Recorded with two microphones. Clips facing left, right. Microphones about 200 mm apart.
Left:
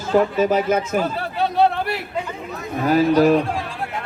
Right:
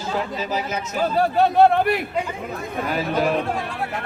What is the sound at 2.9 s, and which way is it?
Speech, 40° left (ahead or behind).